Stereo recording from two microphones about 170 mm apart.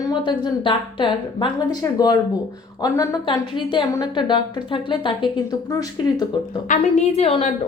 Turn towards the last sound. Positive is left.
turn(degrees=30)  # may be behind; listen again after turning